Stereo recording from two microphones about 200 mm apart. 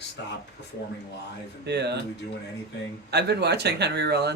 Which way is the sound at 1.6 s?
55° right (ahead or behind).